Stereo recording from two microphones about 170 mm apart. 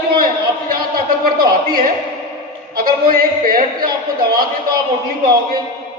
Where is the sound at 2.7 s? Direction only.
60° right (ahead or behind).